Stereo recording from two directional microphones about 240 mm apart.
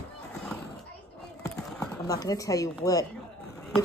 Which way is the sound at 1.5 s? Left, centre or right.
Centre.